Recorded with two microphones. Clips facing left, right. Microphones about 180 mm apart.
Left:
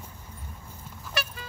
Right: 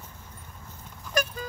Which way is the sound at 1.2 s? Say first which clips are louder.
Right 6 dB; 45° right (ahead or behind).